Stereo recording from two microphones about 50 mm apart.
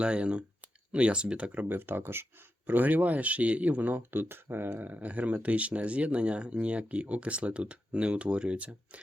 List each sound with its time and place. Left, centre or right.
0.0 s speech: right
1.6 s speech: right
2.6 s speech: right
4.9 s speech: right